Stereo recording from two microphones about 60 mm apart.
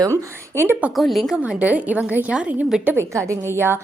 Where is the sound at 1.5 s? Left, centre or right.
Right.